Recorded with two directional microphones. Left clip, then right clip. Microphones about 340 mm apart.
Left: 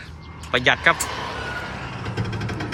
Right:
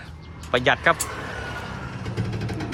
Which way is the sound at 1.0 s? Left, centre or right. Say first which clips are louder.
Left 4 dB; centre.